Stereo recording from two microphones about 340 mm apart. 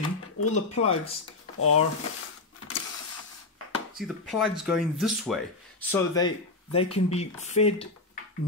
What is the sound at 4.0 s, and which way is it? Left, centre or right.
Speech, centre.